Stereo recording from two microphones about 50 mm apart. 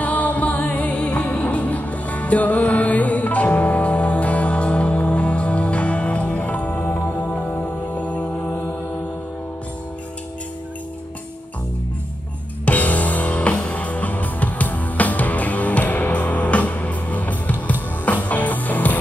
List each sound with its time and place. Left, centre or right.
0.0 s music: left
8.4 s mantra: left
12.6 s music: left